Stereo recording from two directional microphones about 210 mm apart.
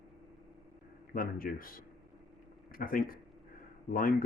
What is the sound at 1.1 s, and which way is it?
Speech, 45° left (ahead or behind).